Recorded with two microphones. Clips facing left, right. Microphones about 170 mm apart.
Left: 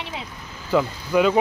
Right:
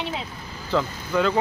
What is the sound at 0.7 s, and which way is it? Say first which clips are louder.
Speech: left 4 dB; 15° left (ahead or behind).